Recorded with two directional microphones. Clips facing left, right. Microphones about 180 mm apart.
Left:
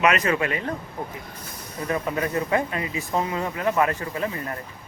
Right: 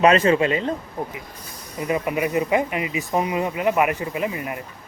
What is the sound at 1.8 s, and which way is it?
Speech, 15° right (ahead or behind).